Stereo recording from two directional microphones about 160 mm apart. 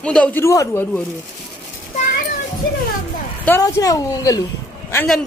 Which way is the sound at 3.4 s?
20° left (ahead or behind).